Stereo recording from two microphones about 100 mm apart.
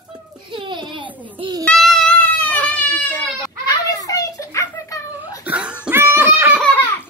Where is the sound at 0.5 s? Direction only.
55° right (ahead or behind).